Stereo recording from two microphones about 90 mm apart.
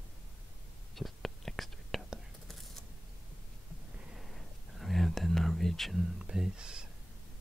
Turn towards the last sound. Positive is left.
turn(degrees=-10)  # may be behind; listen again after turning